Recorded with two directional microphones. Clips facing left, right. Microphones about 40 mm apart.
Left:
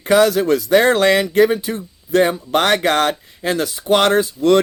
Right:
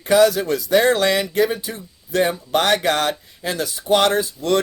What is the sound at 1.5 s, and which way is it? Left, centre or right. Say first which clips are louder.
Speech: left 7 dB; left.